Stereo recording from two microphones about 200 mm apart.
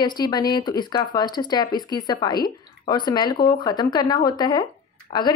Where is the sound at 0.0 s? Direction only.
20° left (ahead or behind).